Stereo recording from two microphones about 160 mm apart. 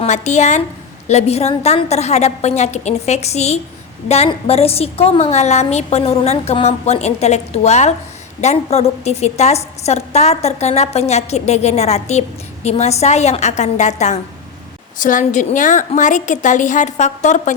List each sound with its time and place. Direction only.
0.0 s a woman's voice: 45° left (ahead or behind)